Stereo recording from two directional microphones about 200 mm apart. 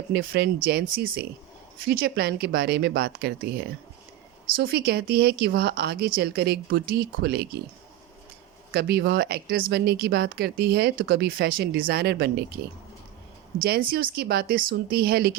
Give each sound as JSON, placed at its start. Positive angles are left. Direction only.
{"t": 0.1, "sound": "speech", "side_deg": -50}
{"t": 8.7, "sound": "speech", "side_deg": -55}
{"t": 13.6, "sound": "speech", "side_deg": -45}